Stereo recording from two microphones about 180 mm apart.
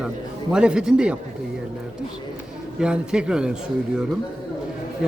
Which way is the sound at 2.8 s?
5° right (ahead or behind).